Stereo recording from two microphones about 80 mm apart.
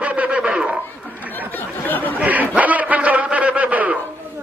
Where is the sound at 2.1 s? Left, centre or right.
Centre.